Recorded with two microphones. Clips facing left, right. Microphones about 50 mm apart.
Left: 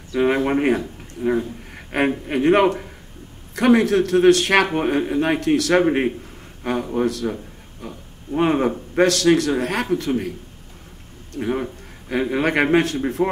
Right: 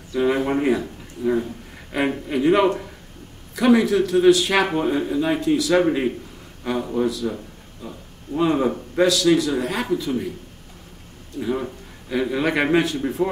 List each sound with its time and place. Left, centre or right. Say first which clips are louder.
0.1 s a man's voice: left 2 dB; left
4.7 s a man's voice: left 1 dB; left
11.3 s a man's voice: left 1 dB; left